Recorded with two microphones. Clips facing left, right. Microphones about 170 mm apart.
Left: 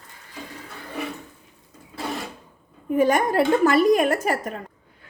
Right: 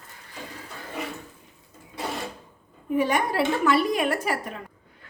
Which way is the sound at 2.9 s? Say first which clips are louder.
Left 4 dB; 45° left (ahead or behind).